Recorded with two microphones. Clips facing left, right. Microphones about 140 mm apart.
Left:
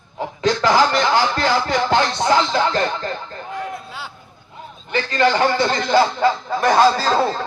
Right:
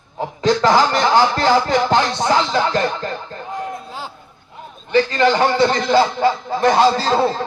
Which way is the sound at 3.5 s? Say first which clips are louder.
Right 2 dB; 40° right (ahead or behind).